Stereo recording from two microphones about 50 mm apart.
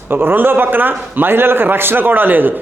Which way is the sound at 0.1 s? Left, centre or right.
Right.